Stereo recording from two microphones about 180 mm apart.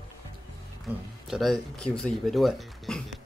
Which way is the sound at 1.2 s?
Centre (ahead or behind).